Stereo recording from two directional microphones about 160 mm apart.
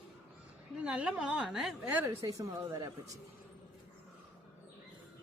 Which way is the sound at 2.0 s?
20° right (ahead or behind).